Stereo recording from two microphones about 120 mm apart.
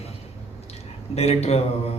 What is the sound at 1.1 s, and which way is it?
Speech, 60° left (ahead or behind).